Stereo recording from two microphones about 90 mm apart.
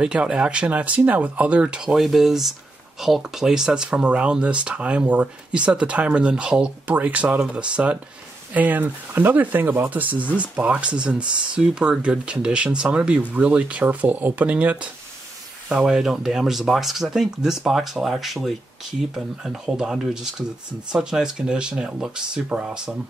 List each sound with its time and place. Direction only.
0.0 s speech: 10° right (ahead or behind)